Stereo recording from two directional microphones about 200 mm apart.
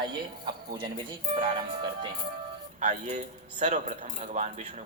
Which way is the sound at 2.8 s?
35° right (ahead or behind).